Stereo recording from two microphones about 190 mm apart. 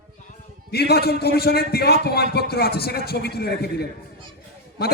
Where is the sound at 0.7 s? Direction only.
55° left (ahead or behind).